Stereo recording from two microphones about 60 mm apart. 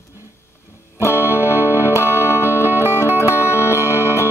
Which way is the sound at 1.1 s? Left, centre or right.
Right.